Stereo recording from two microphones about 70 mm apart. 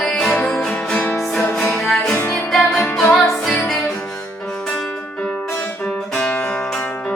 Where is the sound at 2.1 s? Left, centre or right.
Left.